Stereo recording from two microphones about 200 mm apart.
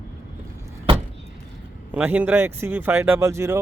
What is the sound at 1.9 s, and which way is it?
Speech, 10° right (ahead or behind).